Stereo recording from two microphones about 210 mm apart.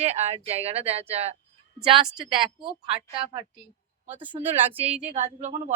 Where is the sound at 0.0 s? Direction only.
30° right (ahead or behind).